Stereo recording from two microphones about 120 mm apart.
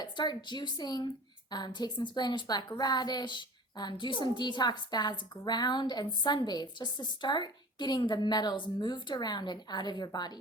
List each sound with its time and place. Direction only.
0.0 s a woman's voice: 40° left (ahead or behind)